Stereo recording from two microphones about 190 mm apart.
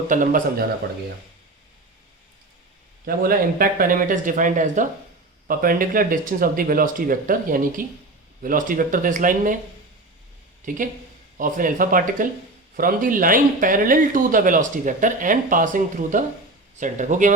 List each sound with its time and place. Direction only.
0.1 s speech: 45° right (ahead or behind)
3.1 s speech: 50° right (ahead or behind)
10.6 s speech: 40° right (ahead or behind)